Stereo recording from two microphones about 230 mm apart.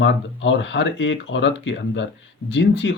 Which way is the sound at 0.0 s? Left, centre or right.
Left.